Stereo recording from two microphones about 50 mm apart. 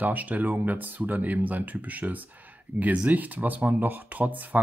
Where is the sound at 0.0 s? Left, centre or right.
Right.